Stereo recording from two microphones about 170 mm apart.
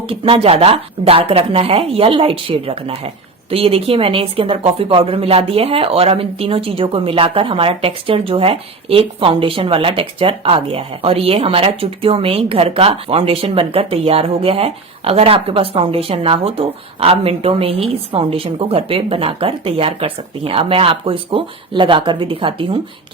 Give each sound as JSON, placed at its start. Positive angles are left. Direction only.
{"t": 0.1, "sound": "speech", "side_deg": -35}